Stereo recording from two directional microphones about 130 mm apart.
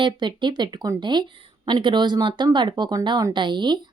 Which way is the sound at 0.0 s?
35° right (ahead or behind).